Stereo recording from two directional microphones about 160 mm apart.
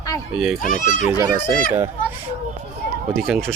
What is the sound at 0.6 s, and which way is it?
Speech, 55° left (ahead or behind).